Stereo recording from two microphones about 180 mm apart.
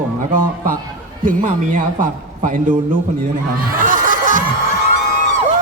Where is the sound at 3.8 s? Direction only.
50° right (ahead or behind).